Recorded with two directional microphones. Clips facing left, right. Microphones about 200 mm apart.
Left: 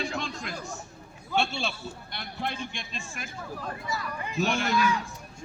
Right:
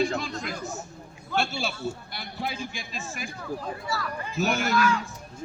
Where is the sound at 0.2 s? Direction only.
5° right (ahead or behind).